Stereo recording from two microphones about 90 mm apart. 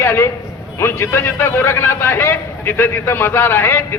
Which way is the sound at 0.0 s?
25° left (ahead or behind).